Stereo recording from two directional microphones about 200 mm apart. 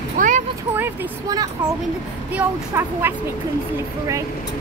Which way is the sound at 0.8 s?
15° right (ahead or behind).